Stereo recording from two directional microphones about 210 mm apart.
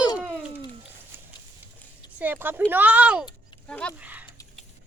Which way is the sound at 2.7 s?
10° right (ahead or behind).